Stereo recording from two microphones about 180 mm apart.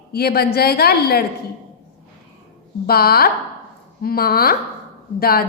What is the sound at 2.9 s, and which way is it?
A woman's voice, 60° left (ahead or behind).